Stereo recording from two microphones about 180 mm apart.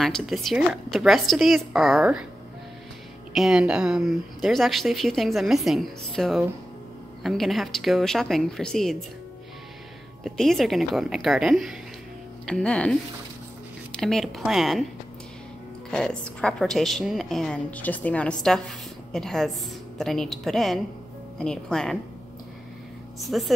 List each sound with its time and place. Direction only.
0.0 s speech: centre (ahead or behind)
3.3 s speech: centre (ahead or behind)
10.2 s speech: centre (ahead or behind)
13.9 s speech: centre (ahead or behind)
15.9 s speech: 5° left (ahead or behind)
23.2 s speech: centre (ahead or behind)